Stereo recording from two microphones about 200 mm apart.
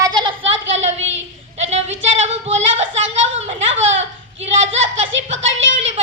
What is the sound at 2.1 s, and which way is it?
Music, 35° right (ahead or behind).